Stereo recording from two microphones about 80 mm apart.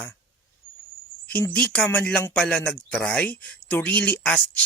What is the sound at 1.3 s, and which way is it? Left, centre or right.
Speech, centre.